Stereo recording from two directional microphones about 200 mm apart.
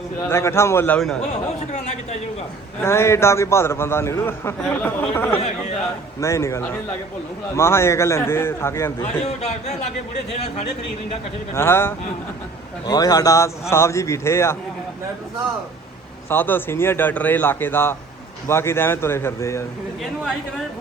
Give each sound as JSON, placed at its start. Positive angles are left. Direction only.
{"t": 0.3, "sound": "a man's voice", "side_deg": 15}
{"t": 1.3, "sound": "speech", "side_deg": 35}
{"t": 2.8, "sound": "a man's voice", "side_deg": 15}
{"t": 9.0, "sound": "speech", "side_deg": 35}
{"t": 11.5, "sound": "a man's voice", "side_deg": 10}
{"t": 16.3, "sound": "a man's voice", "side_deg": 10}